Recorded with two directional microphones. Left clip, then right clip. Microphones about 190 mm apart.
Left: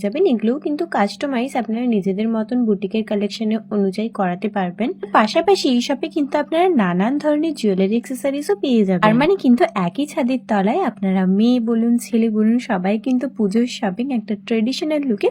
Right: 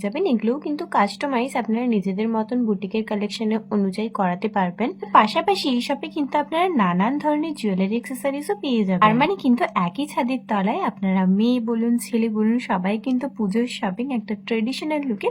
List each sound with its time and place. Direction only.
0.0 s speech: 15° left (ahead or behind)
5.1 s speech: 15° left (ahead or behind)